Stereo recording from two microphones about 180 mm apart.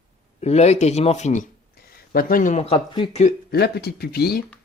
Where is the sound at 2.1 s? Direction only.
55° left (ahead or behind); by 3.2 s 30° left (ahead or behind).